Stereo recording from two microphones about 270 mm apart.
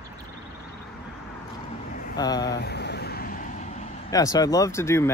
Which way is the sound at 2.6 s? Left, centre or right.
Left.